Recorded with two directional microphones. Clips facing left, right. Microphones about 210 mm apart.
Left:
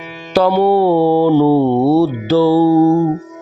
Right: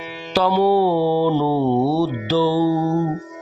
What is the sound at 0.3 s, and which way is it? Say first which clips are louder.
Speech: left 4 dB; 55° left (ahead or behind).